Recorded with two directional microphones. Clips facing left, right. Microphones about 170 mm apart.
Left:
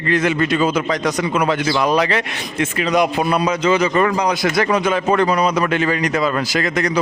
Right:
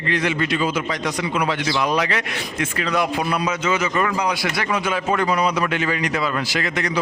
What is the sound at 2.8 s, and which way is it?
Speech, 20° left (ahead or behind).